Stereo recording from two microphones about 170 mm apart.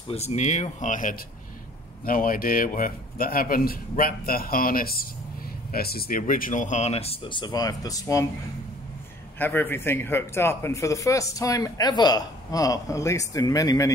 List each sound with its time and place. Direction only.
0.1 s a man's voice: 35° left (ahead or behind); by 8.3 s 20° left (ahead or behind)
9.4 s speech: 10° left (ahead or behind)